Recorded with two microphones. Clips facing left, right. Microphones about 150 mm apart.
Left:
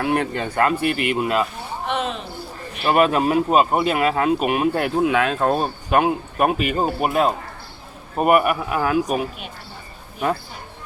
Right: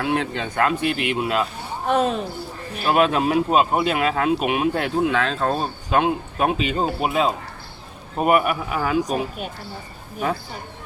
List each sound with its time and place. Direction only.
0.0 s speech: 5° left (ahead or behind)
1.9 s speech: 40° right (ahead or behind)
2.8 s speech: centre (ahead or behind)